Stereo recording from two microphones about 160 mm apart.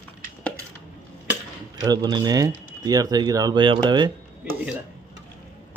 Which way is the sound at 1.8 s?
25° right (ahead or behind).